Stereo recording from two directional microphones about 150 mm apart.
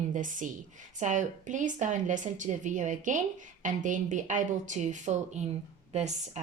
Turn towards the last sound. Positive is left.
turn(degrees=-50)  # may be behind; listen again after turning